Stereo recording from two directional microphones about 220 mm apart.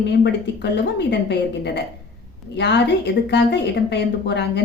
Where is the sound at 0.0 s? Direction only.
50° left (ahead or behind).